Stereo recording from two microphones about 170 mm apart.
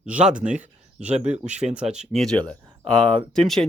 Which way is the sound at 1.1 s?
40° right (ahead or behind).